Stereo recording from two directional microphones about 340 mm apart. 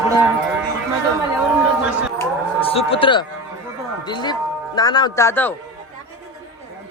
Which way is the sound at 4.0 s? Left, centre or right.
Centre.